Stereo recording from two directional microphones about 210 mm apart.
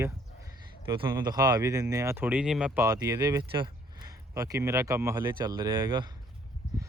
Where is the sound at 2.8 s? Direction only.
15° right (ahead or behind).